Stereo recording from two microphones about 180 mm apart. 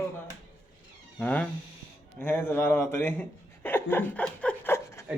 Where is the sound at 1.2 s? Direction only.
10° left (ahead or behind).